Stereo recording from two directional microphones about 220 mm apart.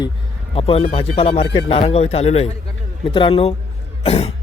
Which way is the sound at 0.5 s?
25° left (ahead or behind).